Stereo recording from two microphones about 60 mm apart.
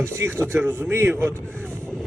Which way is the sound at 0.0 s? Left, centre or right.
Right.